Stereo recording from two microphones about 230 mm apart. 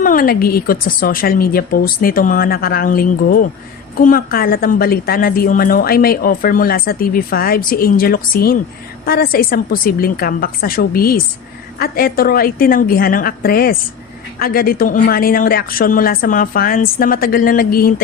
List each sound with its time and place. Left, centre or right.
0.0 s a woman's voice: left